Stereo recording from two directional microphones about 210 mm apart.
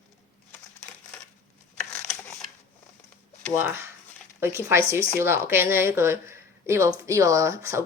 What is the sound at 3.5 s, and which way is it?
A woman's voice, 10° right (ahead or behind).